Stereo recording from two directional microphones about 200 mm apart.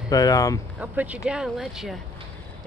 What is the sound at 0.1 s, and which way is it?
Speech, 20° left (ahead or behind).